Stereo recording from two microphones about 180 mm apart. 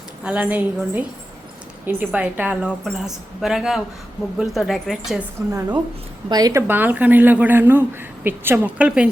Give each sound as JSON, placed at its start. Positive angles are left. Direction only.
{"t": 0.3, "sound": "a woman's voice", "side_deg": -10}
{"t": 5.5, "sound": "speech", "side_deg": -15}